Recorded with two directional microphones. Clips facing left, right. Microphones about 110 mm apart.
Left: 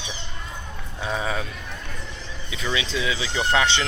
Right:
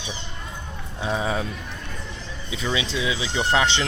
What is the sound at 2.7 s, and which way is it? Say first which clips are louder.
Speech: left 1 dB; 20° right (ahead or behind).